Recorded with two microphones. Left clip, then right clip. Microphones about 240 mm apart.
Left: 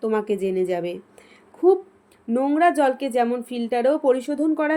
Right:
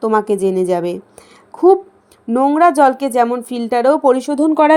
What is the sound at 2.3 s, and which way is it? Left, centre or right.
Speech, right.